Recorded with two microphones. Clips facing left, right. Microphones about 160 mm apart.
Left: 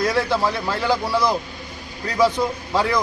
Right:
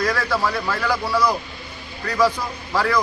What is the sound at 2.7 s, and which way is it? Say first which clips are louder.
Speech: right 2 dB; 20° left (ahead or behind).